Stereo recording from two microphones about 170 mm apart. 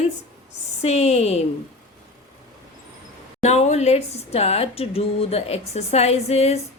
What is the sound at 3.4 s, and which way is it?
Speech, 40° left (ahead or behind).